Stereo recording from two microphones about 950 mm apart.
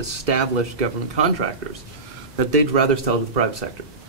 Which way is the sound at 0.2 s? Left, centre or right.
Right.